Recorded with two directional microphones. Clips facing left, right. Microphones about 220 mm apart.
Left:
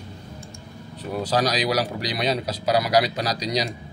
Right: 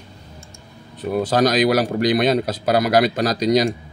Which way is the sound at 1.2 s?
50° right (ahead or behind).